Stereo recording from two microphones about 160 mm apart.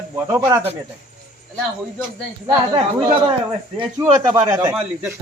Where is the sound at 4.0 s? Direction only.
20° right (ahead or behind).